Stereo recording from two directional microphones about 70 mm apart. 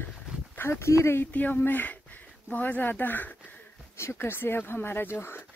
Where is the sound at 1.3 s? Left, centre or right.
Left.